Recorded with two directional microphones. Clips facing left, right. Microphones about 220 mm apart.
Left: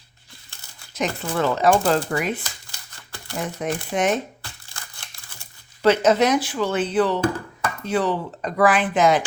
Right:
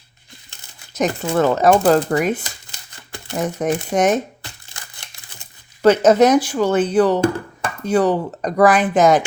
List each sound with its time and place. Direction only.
0.9 s speech: 45° right (ahead or behind)
2.0 s speech: 40° right (ahead or behind)
3.3 s speech: 45° right (ahead or behind)
5.8 s speech: 45° right (ahead or behind)